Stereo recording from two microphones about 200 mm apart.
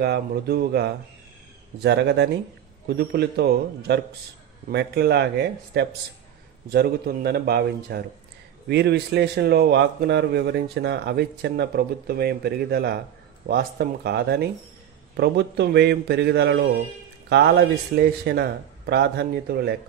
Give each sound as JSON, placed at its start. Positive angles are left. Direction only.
{"t": 0.0, "sound": "a man's voice", "side_deg": -55}